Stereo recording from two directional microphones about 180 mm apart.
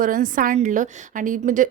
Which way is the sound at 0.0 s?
50° right (ahead or behind).